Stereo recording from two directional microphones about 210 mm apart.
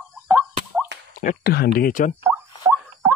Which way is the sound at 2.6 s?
15° right (ahead or behind).